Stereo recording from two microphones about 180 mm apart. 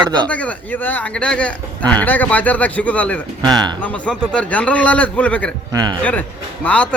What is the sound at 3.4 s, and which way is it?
Speech, 25° right (ahead or behind).